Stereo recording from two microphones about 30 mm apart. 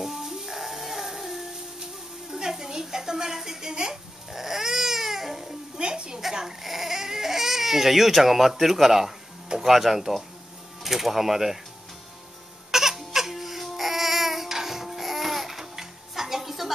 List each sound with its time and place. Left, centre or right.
0.0 s music: centre
2.3 s a sound: centre
3.7 s babbling: centre
5.8 s a sound: right
6.4 s crying: centre
9.6 s speech: centre
12.7 s music: centre